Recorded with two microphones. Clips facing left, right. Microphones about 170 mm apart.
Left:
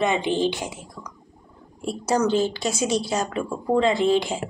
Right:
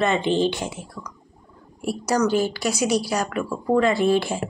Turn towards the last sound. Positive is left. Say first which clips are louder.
# right 1 dB
turn(degrees=20)  # may be behind; listen again after turning